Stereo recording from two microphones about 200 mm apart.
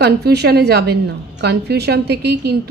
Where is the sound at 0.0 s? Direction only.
55° right (ahead or behind).